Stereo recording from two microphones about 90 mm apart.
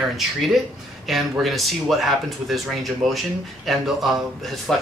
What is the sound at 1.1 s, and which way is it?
Speech, centre (ahead or behind).